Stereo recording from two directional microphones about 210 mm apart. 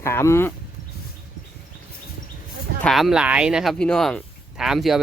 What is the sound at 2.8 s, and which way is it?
Speech, centre (ahead or behind).